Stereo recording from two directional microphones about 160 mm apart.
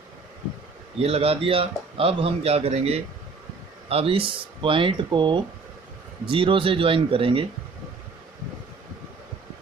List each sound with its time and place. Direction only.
0.9 s a man's voice: 40° right (ahead or behind)